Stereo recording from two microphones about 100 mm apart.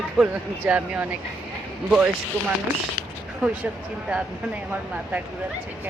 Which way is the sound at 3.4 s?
10° right (ahead or behind).